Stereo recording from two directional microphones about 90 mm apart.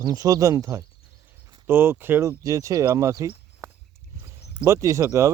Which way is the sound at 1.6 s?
25° right (ahead or behind).